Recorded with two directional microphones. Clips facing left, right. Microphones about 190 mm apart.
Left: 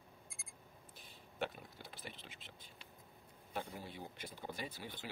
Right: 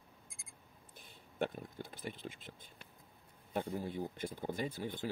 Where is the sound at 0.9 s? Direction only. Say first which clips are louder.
Right 5 dB; 50° right (ahead or behind).